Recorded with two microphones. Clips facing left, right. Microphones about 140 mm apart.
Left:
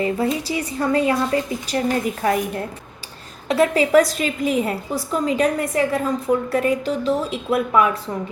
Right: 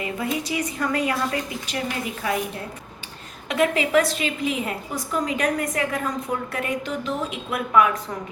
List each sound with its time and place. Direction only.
0.0 s a woman's voice: 30° left (ahead or behind)
3.5 s a woman's voice: 35° left (ahead or behind)